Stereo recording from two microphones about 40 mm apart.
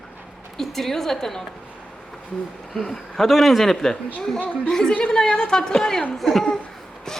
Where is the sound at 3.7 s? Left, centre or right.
Centre.